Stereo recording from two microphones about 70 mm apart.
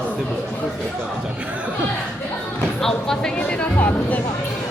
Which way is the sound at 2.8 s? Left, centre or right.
Centre.